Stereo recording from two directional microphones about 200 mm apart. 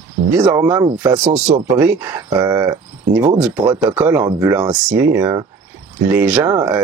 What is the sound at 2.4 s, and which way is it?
Speech, 20° right (ahead or behind).